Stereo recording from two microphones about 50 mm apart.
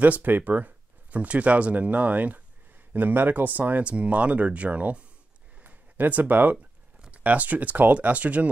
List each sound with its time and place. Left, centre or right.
0.0 s speech: right